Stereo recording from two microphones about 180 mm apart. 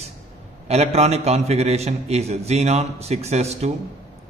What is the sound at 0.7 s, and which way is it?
A man's voice, 35° right (ahead or behind).